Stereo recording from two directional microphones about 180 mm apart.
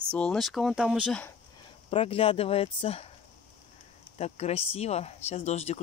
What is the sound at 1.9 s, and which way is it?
Speech, 30° left (ahead or behind).